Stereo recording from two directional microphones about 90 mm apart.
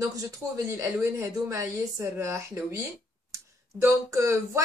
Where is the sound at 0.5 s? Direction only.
35° right (ahead or behind).